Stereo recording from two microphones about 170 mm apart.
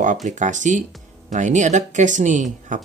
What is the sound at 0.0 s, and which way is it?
Speech, 45° right (ahead or behind).